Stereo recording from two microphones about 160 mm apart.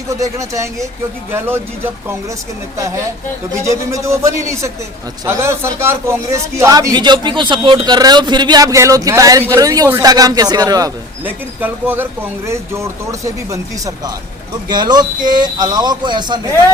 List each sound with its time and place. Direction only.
0.1 s speech: 20° right (ahead or behind)
11.3 s speech: 10° right (ahead or behind); by 16.4 s 30° right (ahead or behind)